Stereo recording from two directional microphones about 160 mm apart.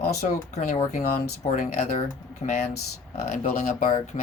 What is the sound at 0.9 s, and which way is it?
Speech, 50° left (ahead or behind).